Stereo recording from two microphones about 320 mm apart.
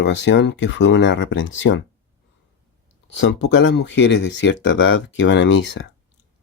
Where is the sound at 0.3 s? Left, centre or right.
Left.